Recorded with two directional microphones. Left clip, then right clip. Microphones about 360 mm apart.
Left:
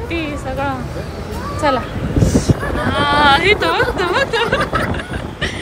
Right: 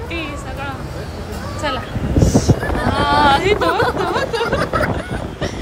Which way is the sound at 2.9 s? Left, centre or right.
Centre.